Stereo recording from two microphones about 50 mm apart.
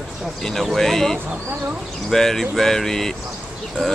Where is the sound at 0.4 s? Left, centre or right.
Centre.